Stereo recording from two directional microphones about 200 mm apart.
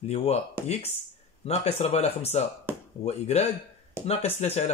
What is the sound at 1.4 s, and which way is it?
Speech, 30° left (ahead or behind).